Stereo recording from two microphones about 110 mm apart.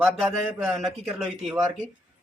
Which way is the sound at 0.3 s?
25° right (ahead or behind).